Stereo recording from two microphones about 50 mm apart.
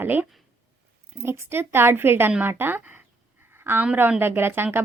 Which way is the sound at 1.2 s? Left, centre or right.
Right.